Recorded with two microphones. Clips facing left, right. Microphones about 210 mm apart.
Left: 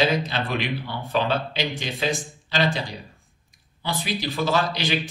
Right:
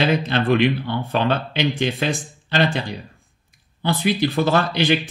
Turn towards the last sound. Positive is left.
turn(degrees=-55)  # may be behind; listen again after turning